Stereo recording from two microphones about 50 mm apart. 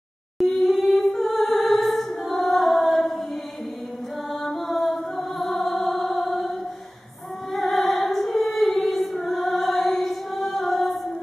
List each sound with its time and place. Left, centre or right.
0.4 s music: centre
4.3 s music: centre
7.5 s music: centre
10.5 s female singing: centre